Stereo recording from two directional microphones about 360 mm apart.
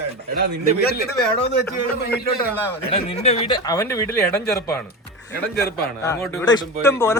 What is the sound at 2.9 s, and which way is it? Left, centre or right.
Speech, centre.